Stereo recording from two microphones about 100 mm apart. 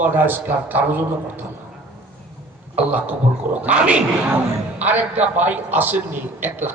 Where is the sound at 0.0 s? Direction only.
20° right (ahead or behind).